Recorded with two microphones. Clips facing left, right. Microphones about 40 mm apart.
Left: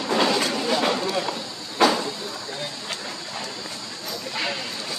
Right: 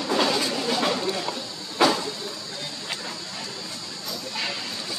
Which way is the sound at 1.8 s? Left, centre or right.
Centre.